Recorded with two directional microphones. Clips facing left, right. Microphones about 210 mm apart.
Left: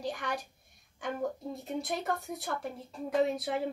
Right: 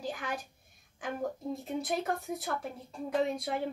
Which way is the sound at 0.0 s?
Centre (ahead or behind).